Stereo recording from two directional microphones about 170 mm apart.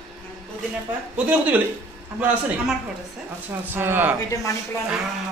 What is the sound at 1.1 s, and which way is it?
Speech, 10° right (ahead or behind).